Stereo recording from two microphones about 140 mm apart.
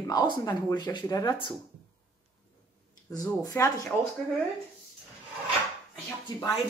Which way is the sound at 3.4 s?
25° left (ahead or behind).